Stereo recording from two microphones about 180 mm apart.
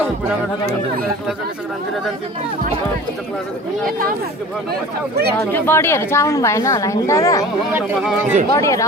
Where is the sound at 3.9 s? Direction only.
50° right (ahead or behind).